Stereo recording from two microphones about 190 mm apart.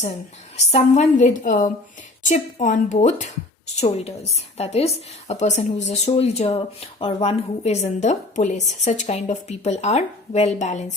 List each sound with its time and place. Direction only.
0.5 s speech: 35° left (ahead or behind)